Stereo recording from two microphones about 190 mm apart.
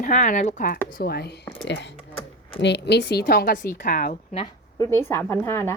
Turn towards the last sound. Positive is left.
turn(degrees=15)  # may be behind; listen again after turning